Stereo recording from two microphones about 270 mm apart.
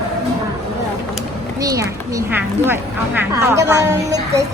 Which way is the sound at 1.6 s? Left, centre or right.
Centre.